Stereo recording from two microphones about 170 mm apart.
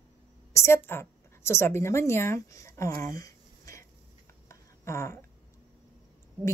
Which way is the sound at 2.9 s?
55° right (ahead or behind).